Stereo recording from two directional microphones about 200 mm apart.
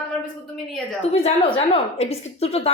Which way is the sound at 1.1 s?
30° left (ahead or behind).